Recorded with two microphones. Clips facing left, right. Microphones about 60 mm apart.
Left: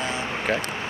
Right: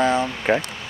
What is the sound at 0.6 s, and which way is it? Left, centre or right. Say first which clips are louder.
Speech: left 4 dB; left.